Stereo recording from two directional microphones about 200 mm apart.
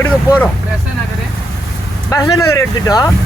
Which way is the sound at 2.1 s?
15° left (ahead or behind).